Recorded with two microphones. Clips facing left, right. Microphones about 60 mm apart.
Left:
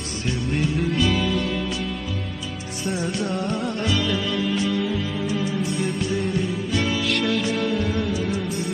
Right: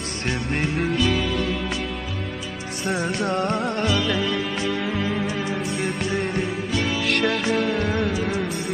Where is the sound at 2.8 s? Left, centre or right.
Right.